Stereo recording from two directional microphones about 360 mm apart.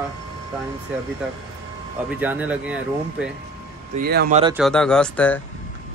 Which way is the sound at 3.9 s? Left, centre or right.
Right.